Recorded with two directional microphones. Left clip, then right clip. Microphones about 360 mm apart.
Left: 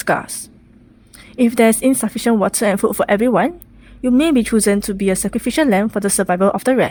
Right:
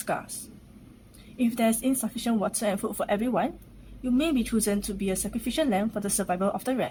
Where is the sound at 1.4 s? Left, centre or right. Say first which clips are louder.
Left 13 dB; left.